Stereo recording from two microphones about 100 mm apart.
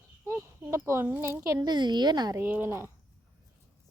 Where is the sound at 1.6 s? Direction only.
45° right (ahead or behind).